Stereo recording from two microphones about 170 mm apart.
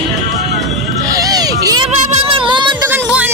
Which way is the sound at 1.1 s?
20° right (ahead or behind).